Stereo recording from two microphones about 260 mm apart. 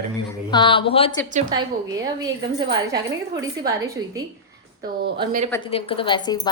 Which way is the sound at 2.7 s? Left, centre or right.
Centre.